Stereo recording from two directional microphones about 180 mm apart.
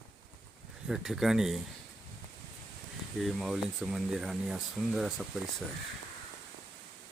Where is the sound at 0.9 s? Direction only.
Centre (ahead or behind).